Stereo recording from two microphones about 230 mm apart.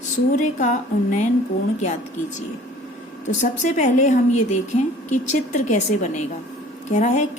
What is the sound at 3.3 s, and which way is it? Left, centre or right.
A woman's voice, left.